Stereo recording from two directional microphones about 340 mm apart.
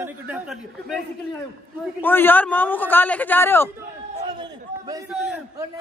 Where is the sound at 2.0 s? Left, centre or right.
Centre.